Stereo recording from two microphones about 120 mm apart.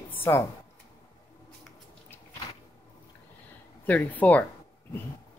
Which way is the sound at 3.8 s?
15° left (ahead or behind).